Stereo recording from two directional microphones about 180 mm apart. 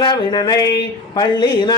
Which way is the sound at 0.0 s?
25° left (ahead or behind).